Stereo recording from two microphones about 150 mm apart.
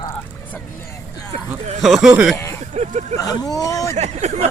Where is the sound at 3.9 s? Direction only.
50° right (ahead or behind).